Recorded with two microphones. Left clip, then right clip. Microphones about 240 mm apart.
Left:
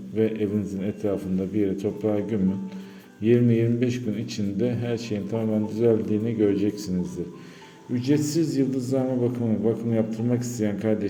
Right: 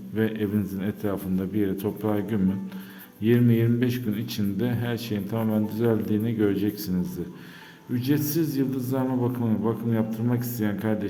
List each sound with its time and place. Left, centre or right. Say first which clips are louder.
0.2 s a man's voice: left 2 dB; centre
7.9 s a man's voice: left 2 dB; centre